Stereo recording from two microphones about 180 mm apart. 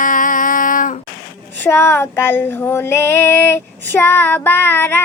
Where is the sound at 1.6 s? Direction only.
15° left (ahead or behind).